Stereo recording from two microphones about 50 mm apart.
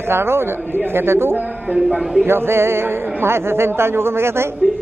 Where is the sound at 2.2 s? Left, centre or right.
Right.